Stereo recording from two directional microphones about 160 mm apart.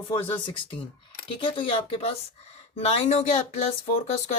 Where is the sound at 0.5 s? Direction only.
30° left (ahead or behind).